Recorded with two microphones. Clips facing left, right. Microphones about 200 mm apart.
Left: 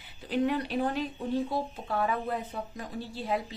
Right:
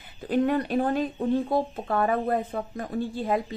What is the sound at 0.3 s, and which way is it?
A woman's voice, 50° right (ahead or behind).